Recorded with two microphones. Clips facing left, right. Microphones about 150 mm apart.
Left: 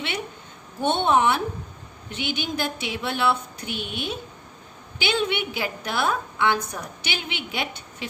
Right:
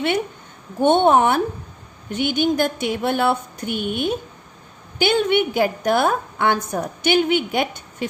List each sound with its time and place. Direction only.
0.8 s a woman's voice: 50° right (ahead or behind)